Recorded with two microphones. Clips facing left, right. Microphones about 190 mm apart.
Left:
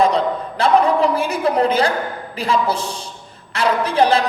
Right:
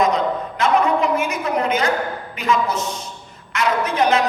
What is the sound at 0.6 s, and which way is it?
A woman's voice, 35° left (ahead or behind).